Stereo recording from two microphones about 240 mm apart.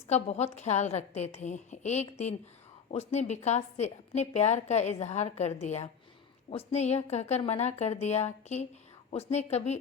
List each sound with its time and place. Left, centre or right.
0.1 s a woman's voice: left